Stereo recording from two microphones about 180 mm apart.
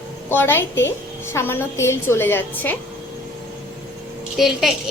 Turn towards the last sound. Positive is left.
turn(degrees=0)  # may be behind; listen again after turning